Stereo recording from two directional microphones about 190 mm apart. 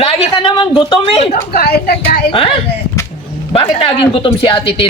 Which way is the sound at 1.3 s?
55° left (ahead or behind).